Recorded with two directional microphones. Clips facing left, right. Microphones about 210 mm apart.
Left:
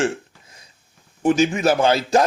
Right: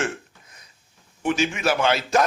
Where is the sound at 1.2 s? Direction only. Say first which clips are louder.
Left 6 dB; 40° left (ahead or behind).